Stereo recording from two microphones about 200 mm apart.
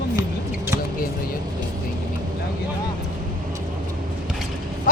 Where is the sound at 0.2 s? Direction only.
15° right (ahead or behind).